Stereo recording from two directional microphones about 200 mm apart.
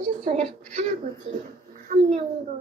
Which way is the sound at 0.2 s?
35° right (ahead or behind).